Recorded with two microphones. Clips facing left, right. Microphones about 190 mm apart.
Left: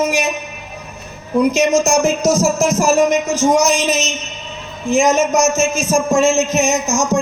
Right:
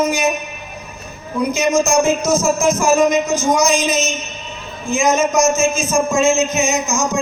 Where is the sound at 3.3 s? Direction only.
80° left.